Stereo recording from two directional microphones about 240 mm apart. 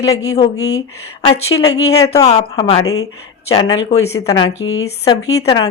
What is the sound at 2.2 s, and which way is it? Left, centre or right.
A woman's voice, left.